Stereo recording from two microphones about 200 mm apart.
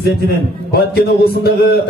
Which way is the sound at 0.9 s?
50° left (ahead or behind).